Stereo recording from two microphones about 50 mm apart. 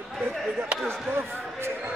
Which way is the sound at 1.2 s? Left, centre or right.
Right.